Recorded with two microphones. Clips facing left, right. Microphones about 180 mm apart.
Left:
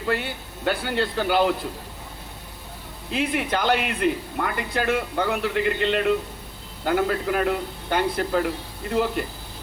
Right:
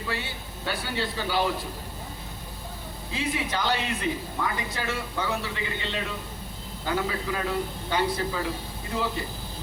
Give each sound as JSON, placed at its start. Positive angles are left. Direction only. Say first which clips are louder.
{"t": 0.1, "sound": "speech", "louder": "left 10 dB", "side_deg": 55}
{"t": 3.1, "sound": "speech", "louder": "left 5 dB", "side_deg": 65}